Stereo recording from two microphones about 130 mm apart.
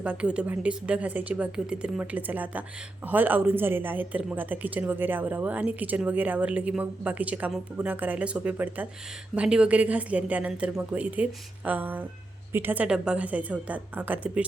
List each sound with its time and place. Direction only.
0.0 s speech: 10° right (ahead or behind)